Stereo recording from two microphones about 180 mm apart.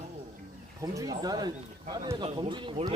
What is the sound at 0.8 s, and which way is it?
A man's voice, 20° right (ahead or behind).